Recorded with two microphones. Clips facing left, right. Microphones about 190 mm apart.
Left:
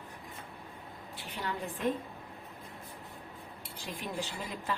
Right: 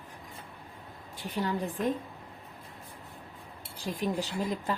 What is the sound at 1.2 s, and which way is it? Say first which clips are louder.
Speech: right 7 dB; 40° right (ahead or behind).